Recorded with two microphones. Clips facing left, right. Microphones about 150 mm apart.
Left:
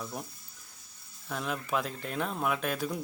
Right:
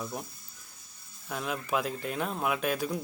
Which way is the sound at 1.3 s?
Centre (ahead or behind).